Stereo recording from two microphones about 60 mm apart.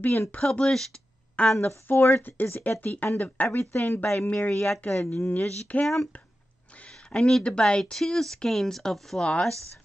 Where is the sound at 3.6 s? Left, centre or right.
Left.